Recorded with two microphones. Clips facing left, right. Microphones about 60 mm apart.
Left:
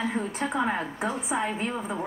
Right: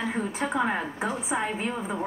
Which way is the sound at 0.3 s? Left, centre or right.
Right.